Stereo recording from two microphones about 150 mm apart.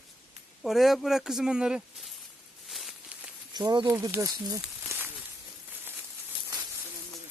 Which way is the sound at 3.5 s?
30° right (ahead or behind).